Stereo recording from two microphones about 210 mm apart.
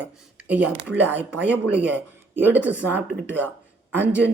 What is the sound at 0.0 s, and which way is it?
Speech, 5° right (ahead or behind).